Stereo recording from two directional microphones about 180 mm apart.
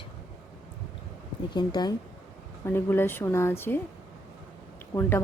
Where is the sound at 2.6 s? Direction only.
10° left (ahead or behind).